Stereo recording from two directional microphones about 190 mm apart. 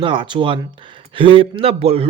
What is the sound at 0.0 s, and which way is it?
Speech, 25° right (ahead or behind).